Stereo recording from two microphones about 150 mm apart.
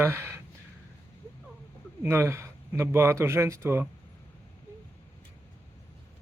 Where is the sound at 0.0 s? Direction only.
15° right (ahead or behind).